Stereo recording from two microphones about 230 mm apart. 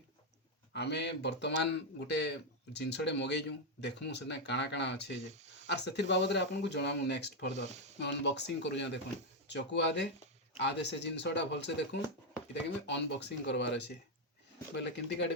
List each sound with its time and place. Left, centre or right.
0.7 s a man's voice: left